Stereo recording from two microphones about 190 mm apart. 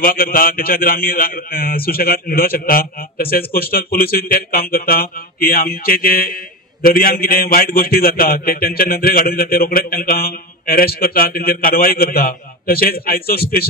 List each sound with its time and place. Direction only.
0.0 s a man's voice: 50° left (ahead or behind)